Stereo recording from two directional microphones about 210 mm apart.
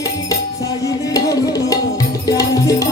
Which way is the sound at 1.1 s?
15° left (ahead or behind).